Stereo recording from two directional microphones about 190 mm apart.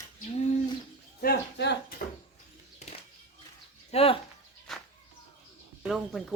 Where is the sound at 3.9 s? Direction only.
30° left (ahead or behind).